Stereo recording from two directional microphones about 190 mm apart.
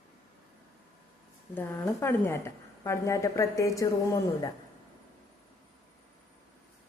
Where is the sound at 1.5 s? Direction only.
10° left (ahead or behind).